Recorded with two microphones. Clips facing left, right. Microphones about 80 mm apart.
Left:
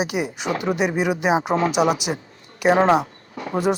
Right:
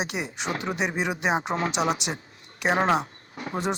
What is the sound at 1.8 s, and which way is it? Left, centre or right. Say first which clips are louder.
Speech: left 6 dB; left.